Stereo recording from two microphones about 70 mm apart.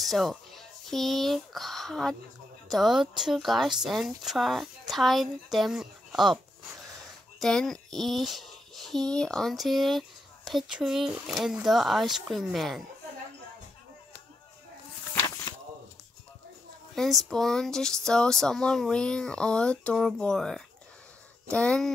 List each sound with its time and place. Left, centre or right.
0.0 s speech: centre
7.3 s speech: centre
15.2 s a sound: left
16.9 s speech: centre